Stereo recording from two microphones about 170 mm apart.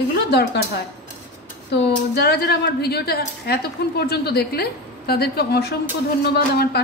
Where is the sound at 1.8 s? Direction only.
75° left (ahead or behind).